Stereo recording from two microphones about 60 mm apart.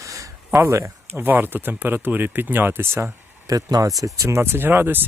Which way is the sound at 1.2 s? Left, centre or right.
Right.